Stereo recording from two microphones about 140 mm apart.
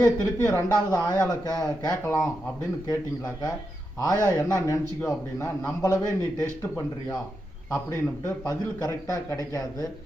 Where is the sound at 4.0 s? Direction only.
25° left (ahead or behind).